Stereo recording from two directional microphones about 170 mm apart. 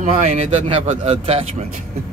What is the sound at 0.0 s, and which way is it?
A man's voice, 45° right (ahead or behind).